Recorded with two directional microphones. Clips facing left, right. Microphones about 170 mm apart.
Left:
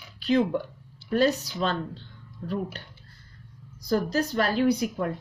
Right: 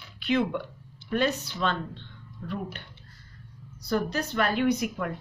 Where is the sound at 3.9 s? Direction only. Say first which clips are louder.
Left 3 dB; 40° left (ahead or behind).